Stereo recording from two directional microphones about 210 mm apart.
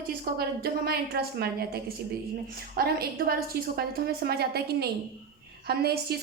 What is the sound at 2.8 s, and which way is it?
A woman's voice, 45° right (ahead or behind).